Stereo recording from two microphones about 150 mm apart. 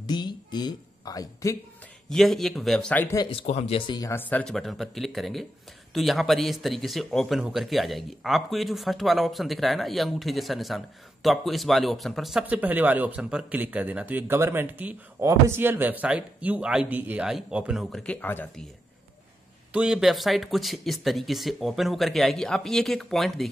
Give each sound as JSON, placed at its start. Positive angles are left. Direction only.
{"t": 0.0, "sound": "speech", "side_deg": 30}
{"t": 2.0, "sound": "speech", "side_deg": 0}
{"t": 3.2, "sound": "speech", "side_deg": 35}
{"t": 4.1, "sound": "speech", "side_deg": 10}
{"t": 19.7, "sound": "speech", "side_deg": -5}